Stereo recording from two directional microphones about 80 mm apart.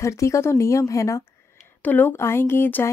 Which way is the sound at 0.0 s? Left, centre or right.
Left.